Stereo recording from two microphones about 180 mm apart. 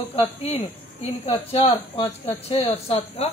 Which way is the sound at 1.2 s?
35° left (ahead or behind).